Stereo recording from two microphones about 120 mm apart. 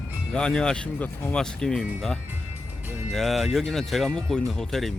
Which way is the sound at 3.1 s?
Centre (ahead or behind).